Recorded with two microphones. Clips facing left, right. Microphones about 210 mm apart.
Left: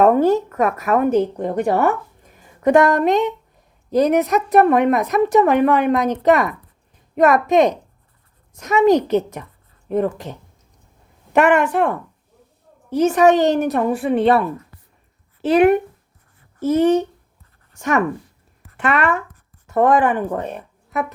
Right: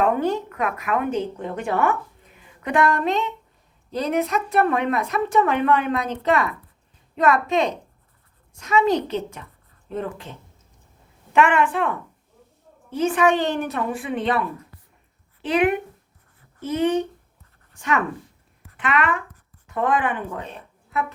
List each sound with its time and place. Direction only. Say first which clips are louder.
0.0 s speech: left 7 dB; 40° left (ahead or behind)
11.3 s a woman's voice: left 4 dB; 40° left (ahead or behind)
12.9 s a woman's voice: left 6 dB; 40° left (ahead or behind)